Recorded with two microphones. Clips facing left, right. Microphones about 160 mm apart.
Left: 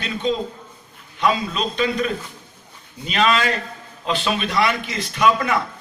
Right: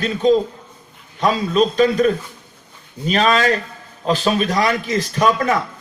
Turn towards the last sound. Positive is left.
turn(degrees=-40)  # may be behind; listen again after turning